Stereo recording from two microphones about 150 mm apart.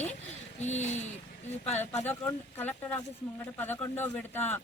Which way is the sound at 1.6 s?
10° left (ahead or behind).